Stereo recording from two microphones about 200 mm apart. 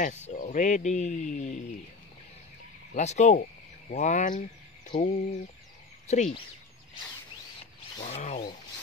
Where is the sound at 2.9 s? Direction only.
35° left (ahead or behind).